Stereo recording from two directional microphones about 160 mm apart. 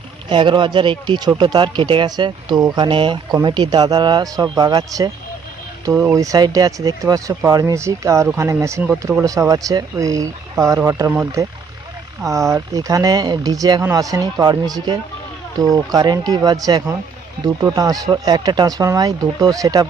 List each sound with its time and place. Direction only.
0.3 s speech: 30° right (ahead or behind)
12.2 s speech: 20° right (ahead or behind)